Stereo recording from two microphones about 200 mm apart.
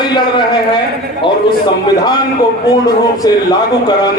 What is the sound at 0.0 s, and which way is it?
A man's voice, 20° left (ahead or behind).